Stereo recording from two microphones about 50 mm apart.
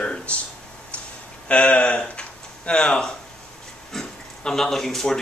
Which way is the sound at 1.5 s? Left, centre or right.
Left.